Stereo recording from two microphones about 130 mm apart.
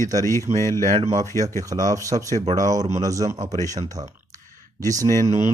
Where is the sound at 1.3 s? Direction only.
25° left (ahead or behind).